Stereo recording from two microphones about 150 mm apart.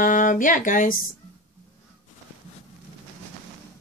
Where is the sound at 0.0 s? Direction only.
60° left (ahead or behind).